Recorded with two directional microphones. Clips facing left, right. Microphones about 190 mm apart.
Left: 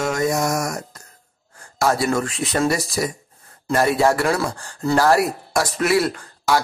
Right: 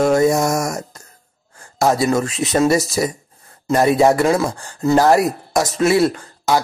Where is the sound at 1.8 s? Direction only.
20° right (ahead or behind).